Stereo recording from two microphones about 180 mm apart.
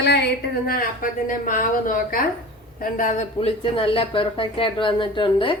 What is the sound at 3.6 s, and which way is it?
Speech, 30° left (ahead or behind).